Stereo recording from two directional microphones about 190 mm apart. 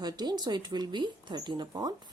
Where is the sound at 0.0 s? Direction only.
20° right (ahead or behind).